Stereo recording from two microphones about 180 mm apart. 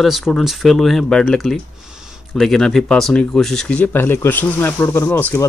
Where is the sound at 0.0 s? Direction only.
Centre (ahead or behind).